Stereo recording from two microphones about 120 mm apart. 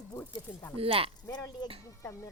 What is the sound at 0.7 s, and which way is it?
Speech, 55° right (ahead or behind).